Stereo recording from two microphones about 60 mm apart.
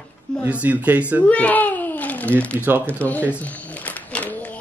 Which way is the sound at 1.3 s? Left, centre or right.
Left.